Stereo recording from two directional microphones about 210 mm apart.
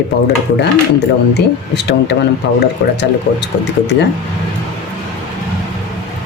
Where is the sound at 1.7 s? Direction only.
55° left (ahead or behind).